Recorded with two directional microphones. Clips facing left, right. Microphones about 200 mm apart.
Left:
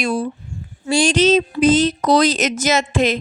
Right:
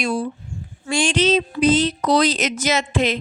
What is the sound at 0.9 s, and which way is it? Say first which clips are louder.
Speech: left 4 dB; 40° left (ahead or behind).